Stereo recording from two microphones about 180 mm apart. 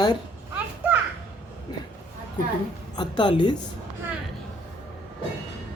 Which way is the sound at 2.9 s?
25° left (ahead or behind).